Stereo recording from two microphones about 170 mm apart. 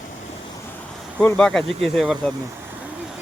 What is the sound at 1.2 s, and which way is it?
Speech, 5° left (ahead or behind).